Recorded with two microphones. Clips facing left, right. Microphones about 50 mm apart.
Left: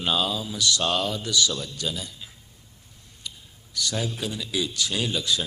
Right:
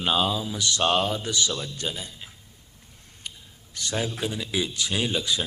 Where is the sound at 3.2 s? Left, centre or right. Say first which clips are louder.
Even; right.